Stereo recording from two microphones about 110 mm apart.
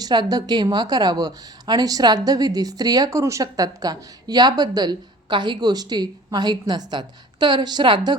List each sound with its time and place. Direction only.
0.0 s a woman's voice: 40° right (ahead or behind)